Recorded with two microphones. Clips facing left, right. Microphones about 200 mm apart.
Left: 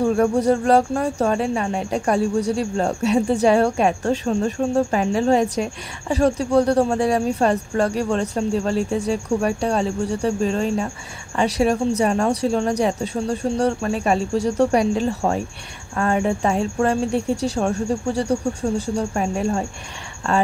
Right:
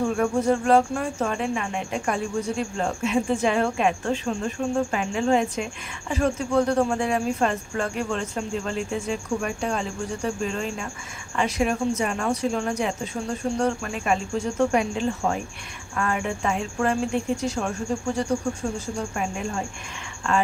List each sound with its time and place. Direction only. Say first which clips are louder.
0.0 s speech: left 5 dB; 35° left (ahead or behind)